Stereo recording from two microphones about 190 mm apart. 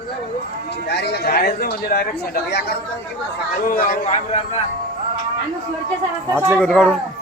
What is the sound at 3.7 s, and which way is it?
Speech, 45° left (ahead or behind).